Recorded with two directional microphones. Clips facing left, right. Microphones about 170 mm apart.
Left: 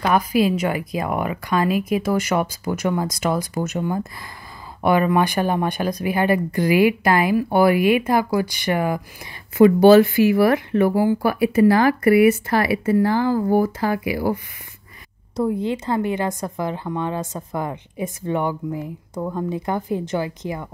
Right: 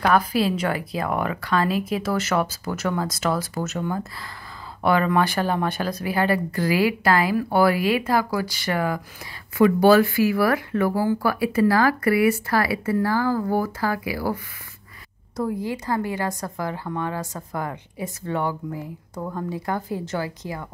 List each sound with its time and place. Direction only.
0.0 s speech: 10° left (ahead or behind)